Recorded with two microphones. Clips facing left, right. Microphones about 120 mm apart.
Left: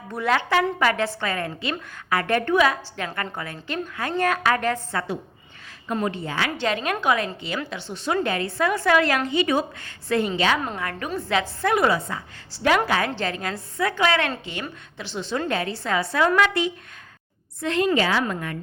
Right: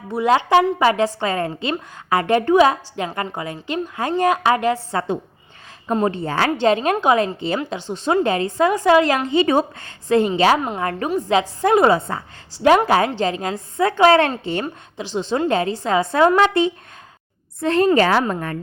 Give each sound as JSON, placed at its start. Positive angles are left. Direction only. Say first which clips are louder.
{"t": 0.3, "sound": "a woman's voice", "louder": "right 6 dB", "side_deg": -25}
{"t": 5.9, "sound": "a woman's voice", "louder": "right 6 dB", "side_deg": -30}
{"t": 6.6, "sound": "a woman's voice", "louder": "right 9 dB", "side_deg": -30}
{"t": 13.9, "sound": "a woman's voice", "louder": "right 10 dB", "side_deg": -35}
{"t": 14.9, "sound": "a woman's voice", "louder": "right 6 dB", "side_deg": -20}